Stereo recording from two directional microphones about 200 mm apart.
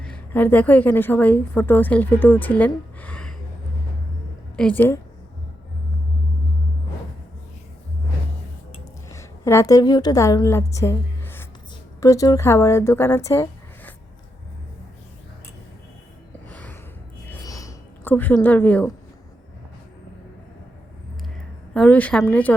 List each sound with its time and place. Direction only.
0.0 s a woman's voice: 5° left (ahead or behind)
4.5 s a woman's voice: 10° left (ahead or behind)
9.0 s a woman's voice: 15° left (ahead or behind)
16.5 s gasp: 5° left (ahead or behind)
17.2 s a sound: 15° left (ahead or behind)
21.7 s a woman's voice: 5° left (ahead or behind)